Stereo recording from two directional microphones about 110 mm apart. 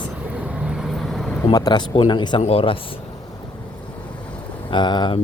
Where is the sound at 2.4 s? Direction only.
60° left (ahead or behind).